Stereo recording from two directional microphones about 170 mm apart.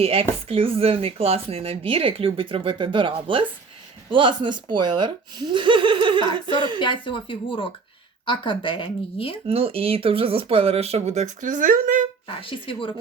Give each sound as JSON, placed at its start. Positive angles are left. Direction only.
{"t": 0.0, "sound": "speech", "side_deg": -35}
{"t": 6.7, "sound": "speech", "side_deg": 30}
{"t": 9.5, "sound": "speech", "side_deg": -35}
{"t": 12.4, "sound": "speech", "side_deg": 30}